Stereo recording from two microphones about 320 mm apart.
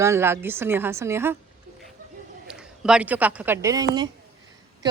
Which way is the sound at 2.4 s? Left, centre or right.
Centre.